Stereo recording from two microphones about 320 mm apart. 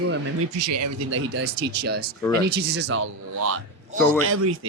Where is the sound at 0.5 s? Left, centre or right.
Right.